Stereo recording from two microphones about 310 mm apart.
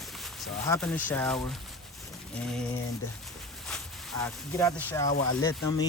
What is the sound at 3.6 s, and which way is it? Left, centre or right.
Speech, centre.